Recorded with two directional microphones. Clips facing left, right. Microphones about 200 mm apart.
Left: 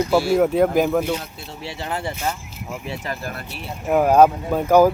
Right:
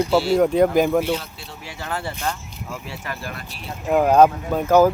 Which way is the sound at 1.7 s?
20° left (ahead or behind).